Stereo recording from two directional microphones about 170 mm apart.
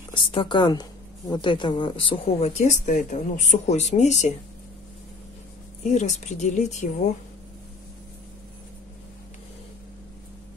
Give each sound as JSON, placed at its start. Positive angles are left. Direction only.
{"t": 0.1, "sound": "a woman's voice", "side_deg": 30}
{"t": 5.9, "sound": "speech", "side_deg": 45}